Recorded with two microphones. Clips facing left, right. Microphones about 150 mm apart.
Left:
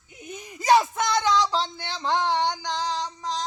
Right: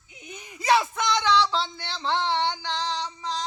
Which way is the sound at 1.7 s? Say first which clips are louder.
Left 2 dB; 45° left (ahead or behind).